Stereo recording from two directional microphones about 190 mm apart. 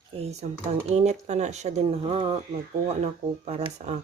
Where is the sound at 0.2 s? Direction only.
35° right (ahead or behind).